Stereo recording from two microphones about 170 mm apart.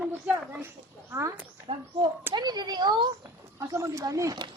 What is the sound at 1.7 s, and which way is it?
Speech, 30° right (ahead or behind).